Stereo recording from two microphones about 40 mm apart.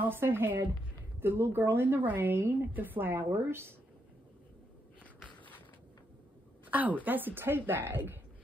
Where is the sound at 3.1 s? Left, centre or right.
Right.